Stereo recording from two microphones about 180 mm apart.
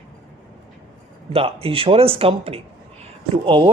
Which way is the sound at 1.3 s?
30° right (ahead or behind).